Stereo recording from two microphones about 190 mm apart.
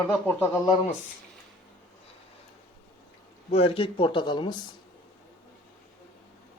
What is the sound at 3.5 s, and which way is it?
Speech, 30° left (ahead or behind).